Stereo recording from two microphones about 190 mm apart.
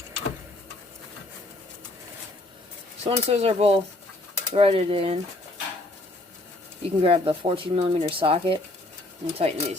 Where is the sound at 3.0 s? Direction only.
35° right (ahead or behind).